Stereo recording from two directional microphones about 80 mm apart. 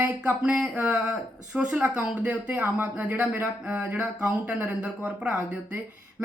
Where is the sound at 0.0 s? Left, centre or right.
Centre.